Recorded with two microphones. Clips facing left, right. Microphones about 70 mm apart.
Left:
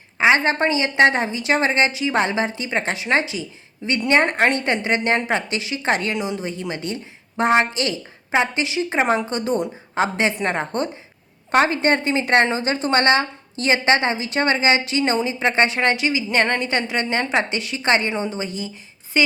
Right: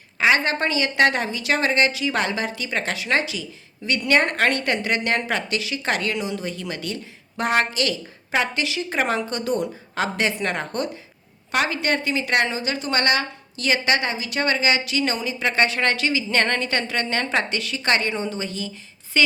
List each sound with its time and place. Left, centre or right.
0.2 s a woman's voice: left